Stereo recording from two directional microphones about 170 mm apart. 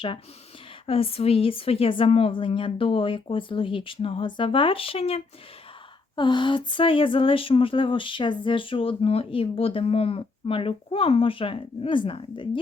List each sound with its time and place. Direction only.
0.9 s speech: 35° left (ahead or behind)